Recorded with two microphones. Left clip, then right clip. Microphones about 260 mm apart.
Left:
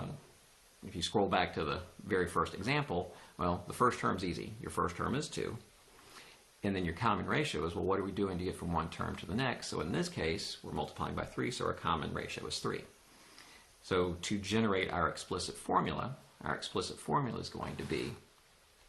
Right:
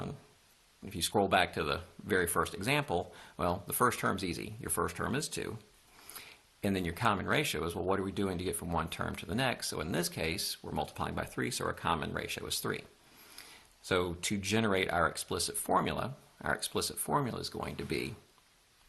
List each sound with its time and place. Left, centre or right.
0.9 s speech: right
6.6 s speech: right
13.8 s speech: right